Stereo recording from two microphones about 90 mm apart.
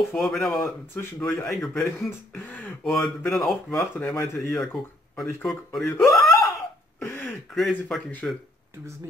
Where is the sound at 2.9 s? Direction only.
5° left (ahead or behind).